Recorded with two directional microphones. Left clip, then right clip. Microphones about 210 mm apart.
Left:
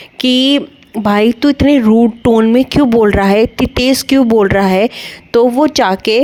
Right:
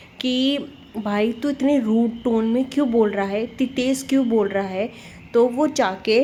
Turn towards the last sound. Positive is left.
turn(degrees=45)  # may be behind; listen again after turning